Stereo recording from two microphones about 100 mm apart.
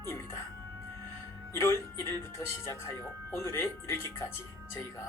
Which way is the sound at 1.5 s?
30° left (ahead or behind).